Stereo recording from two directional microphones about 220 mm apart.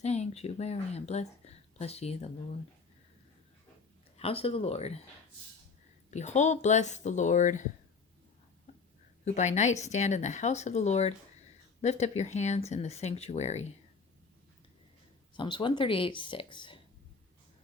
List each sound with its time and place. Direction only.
0.0 s speech: 30° left (ahead or behind)
4.2 s speech: 25° left (ahead or behind)
6.1 s speech: 30° left (ahead or behind)
9.2 s speech: 30° left (ahead or behind)
15.4 s speech: 20° left (ahead or behind)